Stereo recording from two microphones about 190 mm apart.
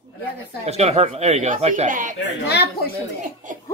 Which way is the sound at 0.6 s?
35° right (ahead or behind).